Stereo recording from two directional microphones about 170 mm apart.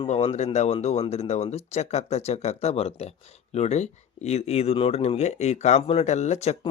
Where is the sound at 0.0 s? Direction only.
35° left (ahead or behind).